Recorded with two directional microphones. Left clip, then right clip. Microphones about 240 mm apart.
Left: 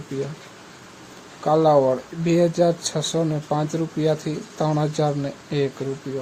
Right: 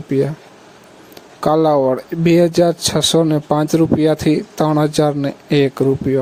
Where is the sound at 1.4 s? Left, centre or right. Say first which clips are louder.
Right 3 dB; right.